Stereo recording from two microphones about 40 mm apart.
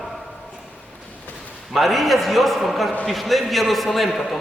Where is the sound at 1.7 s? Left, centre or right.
Centre.